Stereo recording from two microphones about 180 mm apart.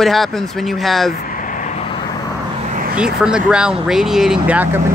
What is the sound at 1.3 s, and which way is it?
Vehicle, 45° left (ahead or behind).